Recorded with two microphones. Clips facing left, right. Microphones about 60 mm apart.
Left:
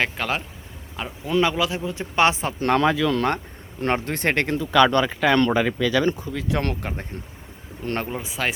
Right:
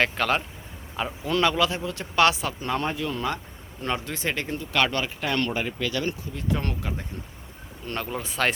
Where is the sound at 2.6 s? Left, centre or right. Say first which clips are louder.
Left 12 dB; left.